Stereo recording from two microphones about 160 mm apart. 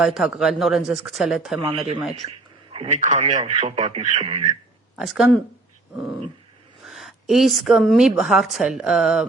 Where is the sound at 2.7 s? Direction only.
35° right (ahead or behind).